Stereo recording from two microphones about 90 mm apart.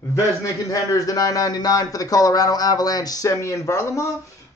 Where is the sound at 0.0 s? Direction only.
35° left (ahead or behind).